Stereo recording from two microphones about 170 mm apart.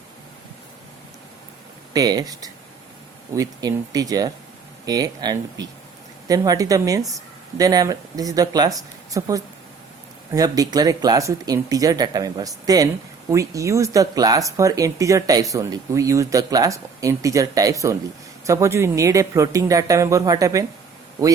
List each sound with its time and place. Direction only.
1.9 s speech: 20° right (ahead or behind)